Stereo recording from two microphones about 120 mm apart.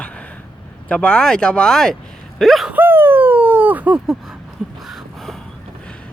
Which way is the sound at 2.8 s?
15° right (ahead or behind).